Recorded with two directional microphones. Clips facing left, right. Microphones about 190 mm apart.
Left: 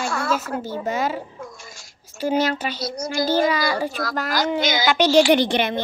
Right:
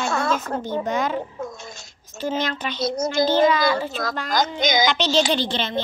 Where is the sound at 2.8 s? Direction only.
25° right (ahead or behind).